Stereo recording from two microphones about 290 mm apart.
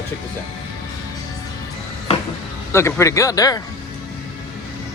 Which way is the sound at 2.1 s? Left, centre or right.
Left.